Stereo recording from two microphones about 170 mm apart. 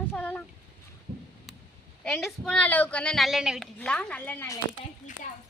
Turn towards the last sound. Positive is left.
turn(degrees=15)  # may be behind; listen again after turning